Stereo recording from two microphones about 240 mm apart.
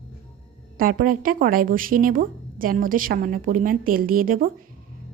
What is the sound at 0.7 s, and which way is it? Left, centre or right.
A woman's voice, right.